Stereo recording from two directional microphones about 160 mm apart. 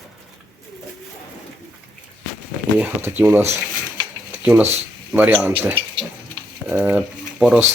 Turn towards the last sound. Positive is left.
turn(degrees=-5)  # may be behind; listen again after turning